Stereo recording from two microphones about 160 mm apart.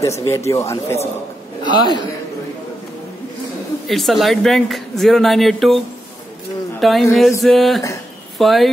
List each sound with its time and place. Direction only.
0.2 s a man's voice: 20° left (ahead or behind)
3.9 s speech: centre (ahead or behind)
6.8 s speech: centre (ahead or behind)